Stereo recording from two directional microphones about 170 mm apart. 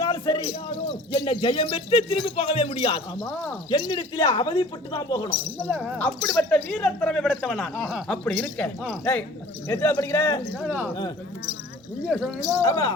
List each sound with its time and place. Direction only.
0.0 s a sound: 25° left (ahead or behind)
1.1 s speech: 30° left (ahead or behind)
5.8 s speech: 5° left (ahead or behind)
10.5 s speech: 5° right (ahead or behind)
12.0 s speech: centre (ahead or behind)
12.6 s speech: 20° left (ahead or behind)